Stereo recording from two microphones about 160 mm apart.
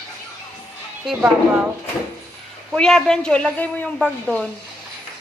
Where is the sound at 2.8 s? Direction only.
5° left (ahead or behind).